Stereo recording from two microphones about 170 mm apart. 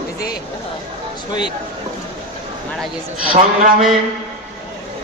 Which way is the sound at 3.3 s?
45° right (ahead or behind).